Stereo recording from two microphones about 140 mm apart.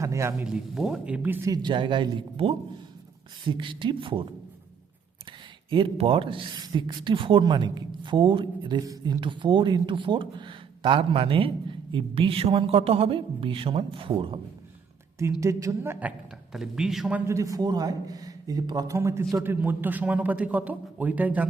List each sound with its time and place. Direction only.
0.0 s a man's voice: 20° right (ahead or behind)
0.4 s a man's voice: 5° right (ahead or behind)
1.5 s speech: 35° right (ahead or behind)
5.7 s speech: 40° right (ahead or behind)
15.2 s a man's voice: 20° right (ahead or behind)
18.9 s a man's voice: 20° right (ahead or behind)